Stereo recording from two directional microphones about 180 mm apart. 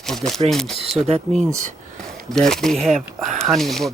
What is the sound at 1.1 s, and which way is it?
Speech, 40° right (ahead or behind).